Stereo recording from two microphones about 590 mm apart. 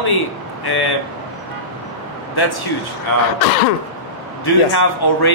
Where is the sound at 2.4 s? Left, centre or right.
Left.